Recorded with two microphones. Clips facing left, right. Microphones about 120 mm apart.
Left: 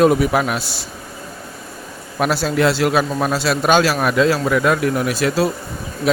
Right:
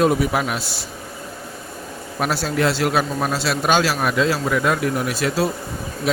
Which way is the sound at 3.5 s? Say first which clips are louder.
Left 4 dB; 55° left (ahead or behind).